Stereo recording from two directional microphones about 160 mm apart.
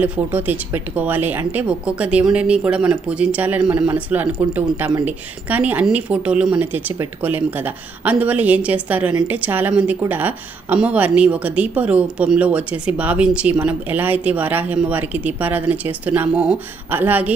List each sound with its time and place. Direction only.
0.0 s a woman's voice: 10° right (ahead or behind)